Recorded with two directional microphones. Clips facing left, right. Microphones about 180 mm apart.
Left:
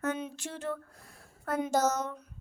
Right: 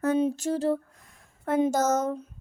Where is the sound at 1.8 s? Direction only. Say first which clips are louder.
Right 5 dB; 50° right (ahead or behind).